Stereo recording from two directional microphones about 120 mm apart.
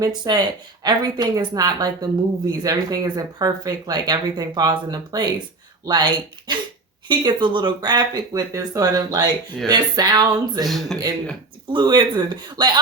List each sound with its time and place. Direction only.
0.0 s speech: 35° right (ahead or behind)
10.7 s a man's voice: centre (ahead or behind)
11.7 s speech: 40° right (ahead or behind)